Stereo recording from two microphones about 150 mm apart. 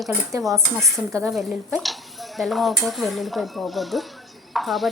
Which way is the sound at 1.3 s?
Centre (ahead or behind).